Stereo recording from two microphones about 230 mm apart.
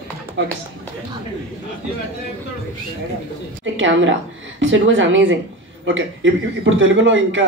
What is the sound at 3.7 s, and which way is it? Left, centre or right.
A man's voice, right.